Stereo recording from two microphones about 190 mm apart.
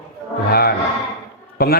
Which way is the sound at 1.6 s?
55° left (ahead or behind).